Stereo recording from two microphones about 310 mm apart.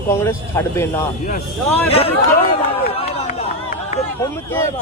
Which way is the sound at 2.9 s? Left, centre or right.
Centre.